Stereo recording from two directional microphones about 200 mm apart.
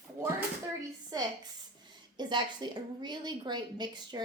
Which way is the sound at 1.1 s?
20° right (ahead or behind).